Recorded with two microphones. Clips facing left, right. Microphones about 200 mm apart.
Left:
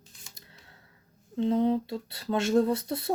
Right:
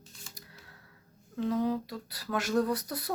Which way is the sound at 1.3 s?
25° left (ahead or behind).